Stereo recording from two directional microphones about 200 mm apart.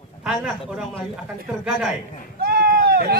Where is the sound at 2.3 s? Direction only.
50° right (ahead or behind).